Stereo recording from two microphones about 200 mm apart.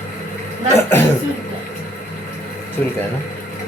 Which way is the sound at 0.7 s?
10° left (ahead or behind).